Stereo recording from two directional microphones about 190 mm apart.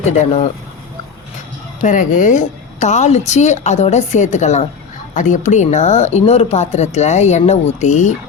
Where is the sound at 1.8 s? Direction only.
40° left (ahead or behind).